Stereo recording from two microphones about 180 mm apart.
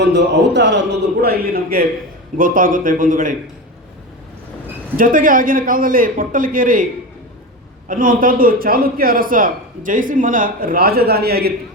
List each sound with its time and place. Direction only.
0.0 s a man's voice: 75° right (ahead or behind); by 3.3 s 50° right (ahead or behind)
4.9 s a man's voice: 50° right (ahead or behind)
7.9 s a man's voice: 50° right (ahead or behind)